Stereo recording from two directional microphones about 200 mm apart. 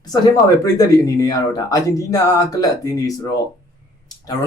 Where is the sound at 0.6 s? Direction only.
20° left (ahead or behind).